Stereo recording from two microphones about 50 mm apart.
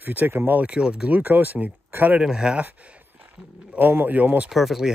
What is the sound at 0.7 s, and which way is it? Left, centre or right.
Speech, centre.